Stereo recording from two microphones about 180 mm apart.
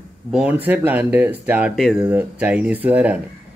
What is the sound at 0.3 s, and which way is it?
Speech, 10° right (ahead or behind).